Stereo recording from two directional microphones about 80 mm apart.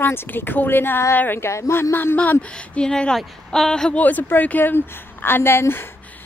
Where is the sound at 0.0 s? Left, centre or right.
Left.